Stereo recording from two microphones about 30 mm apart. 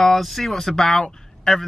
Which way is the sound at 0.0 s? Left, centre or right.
Centre.